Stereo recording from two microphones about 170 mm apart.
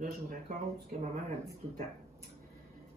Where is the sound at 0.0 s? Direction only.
55° right (ahead or behind).